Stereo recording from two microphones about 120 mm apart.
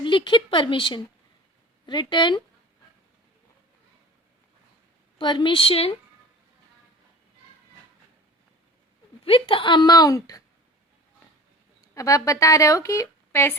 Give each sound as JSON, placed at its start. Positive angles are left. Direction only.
{"t": 0.0, "sound": "a woman's voice", "side_deg": 40}
{"t": 5.1, "sound": "a woman's voice", "side_deg": 40}
{"t": 9.2, "sound": "a woman's voice", "side_deg": 50}
{"t": 11.8, "sound": "speech", "side_deg": 25}